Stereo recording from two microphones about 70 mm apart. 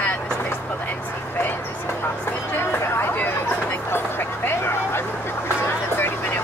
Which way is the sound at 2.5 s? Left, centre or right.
Left.